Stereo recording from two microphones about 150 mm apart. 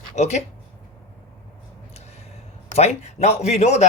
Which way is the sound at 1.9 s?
45° left (ahead or behind).